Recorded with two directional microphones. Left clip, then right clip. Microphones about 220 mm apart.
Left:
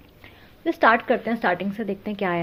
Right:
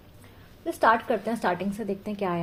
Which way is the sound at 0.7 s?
30° left (ahead or behind).